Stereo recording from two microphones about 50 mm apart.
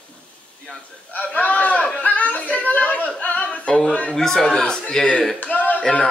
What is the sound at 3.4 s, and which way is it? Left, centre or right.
Singing, centre.